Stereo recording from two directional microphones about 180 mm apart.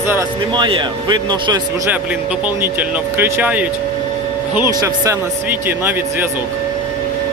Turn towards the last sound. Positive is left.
turn(degrees=-10)  # may be behind; listen again after turning